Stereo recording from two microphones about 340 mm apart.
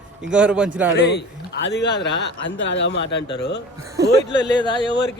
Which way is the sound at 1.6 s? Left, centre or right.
Left.